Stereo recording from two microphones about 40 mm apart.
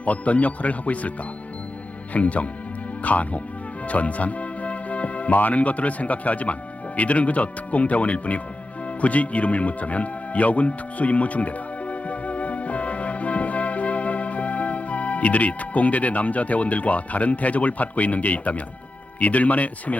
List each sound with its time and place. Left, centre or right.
0.0 s speech: left
2.1 s speech: left